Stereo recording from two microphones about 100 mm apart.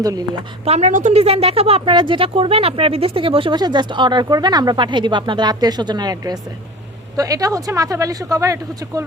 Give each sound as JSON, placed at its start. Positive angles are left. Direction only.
{"t": 0.0, "sound": "speech", "side_deg": -40}
{"t": 0.6, "sound": "a woman's voice", "side_deg": -90}
{"t": 1.8, "sound": "speech", "side_deg": -50}
{"t": 3.6, "sound": "speech", "side_deg": -50}